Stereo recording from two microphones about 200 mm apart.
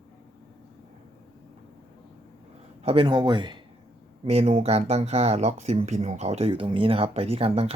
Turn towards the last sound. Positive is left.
turn(degrees=-30)  # may be behind; listen again after turning